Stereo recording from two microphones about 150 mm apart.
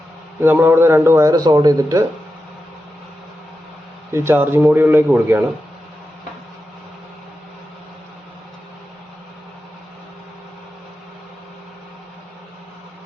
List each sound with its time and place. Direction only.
0.4 s a man's voice: 15° right (ahead or behind)
4.1 s a man's voice: 15° right (ahead or behind)